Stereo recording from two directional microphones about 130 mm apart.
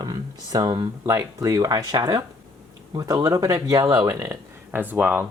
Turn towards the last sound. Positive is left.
turn(degrees=-15)  # may be behind; listen again after turning